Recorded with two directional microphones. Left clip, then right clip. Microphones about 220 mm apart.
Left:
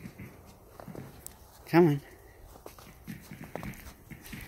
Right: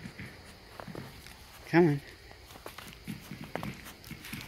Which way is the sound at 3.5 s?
10° right (ahead or behind).